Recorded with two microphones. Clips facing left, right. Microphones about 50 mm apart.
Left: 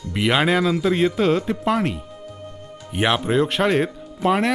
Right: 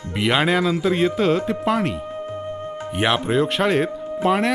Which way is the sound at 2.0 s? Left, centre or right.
Right.